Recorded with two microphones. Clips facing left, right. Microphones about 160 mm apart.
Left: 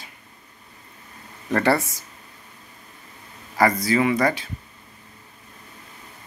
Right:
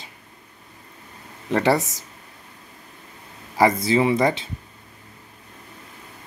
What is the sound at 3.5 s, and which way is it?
Speech, 20° right (ahead or behind).